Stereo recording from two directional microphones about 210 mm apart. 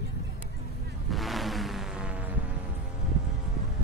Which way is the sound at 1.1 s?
Centre (ahead or behind).